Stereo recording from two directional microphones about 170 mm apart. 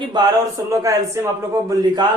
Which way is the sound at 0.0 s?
25° right (ahead or behind).